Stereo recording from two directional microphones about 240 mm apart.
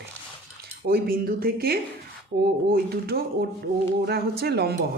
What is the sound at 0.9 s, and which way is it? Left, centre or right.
A woman's voice, right.